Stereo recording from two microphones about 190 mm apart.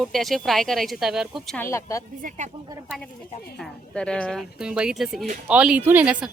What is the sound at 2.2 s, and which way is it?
Speech, 40° right (ahead or behind).